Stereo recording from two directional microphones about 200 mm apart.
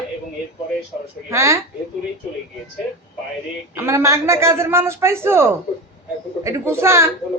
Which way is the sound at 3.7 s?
15° right (ahead or behind).